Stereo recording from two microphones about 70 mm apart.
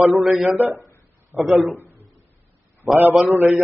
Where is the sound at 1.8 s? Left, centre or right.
Right.